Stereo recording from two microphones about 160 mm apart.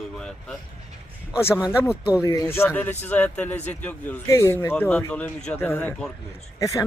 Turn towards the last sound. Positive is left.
turn(degrees=20)  # may be behind; listen again after turning